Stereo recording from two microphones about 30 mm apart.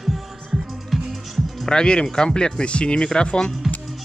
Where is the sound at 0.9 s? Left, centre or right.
Centre.